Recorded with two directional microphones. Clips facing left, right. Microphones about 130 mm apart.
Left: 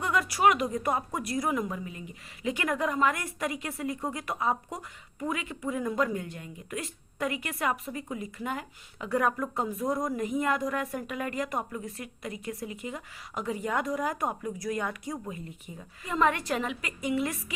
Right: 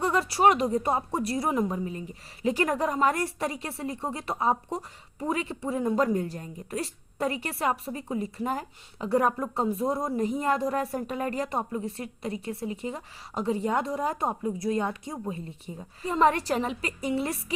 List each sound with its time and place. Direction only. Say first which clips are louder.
0.0 s a woman's voice: right 2 dB; 30° right (ahead or behind)